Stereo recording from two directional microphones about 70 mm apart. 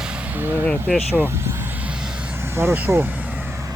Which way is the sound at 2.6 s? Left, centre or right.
Right.